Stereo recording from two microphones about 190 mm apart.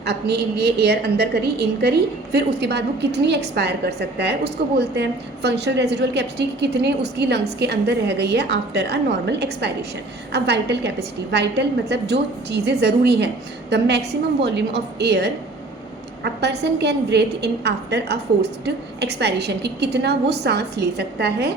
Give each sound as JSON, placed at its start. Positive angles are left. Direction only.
{"t": 0.0, "sound": "a woman's voice", "side_deg": -60}